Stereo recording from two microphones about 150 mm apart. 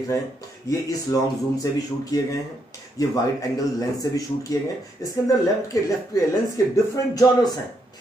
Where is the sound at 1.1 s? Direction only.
25° left (ahead or behind).